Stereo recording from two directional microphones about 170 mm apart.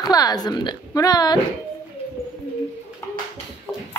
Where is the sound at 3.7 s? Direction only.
10° left (ahead or behind).